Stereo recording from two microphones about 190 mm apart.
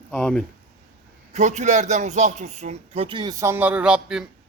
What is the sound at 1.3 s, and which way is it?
Speech, 40° right (ahead or behind).